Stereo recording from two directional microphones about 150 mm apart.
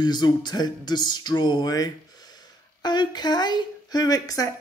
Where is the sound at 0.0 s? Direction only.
30° left (ahead or behind).